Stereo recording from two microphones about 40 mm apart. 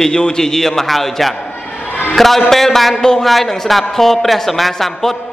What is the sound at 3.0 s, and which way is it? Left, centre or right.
Speech, centre.